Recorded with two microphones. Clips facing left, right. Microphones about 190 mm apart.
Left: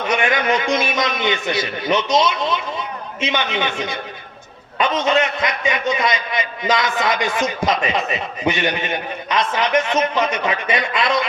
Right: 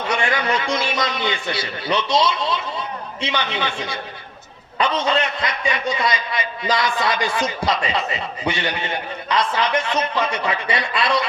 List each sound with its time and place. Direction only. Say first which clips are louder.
0.0 s a man's voice: left 3 dB; 20° left (ahead or behind)